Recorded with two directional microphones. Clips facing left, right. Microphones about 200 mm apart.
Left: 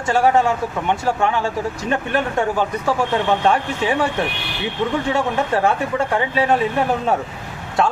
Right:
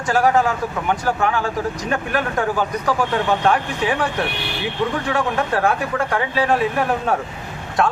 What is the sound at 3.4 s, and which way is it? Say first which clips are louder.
Speech: left 1 dB; 25° left (ahead or behind).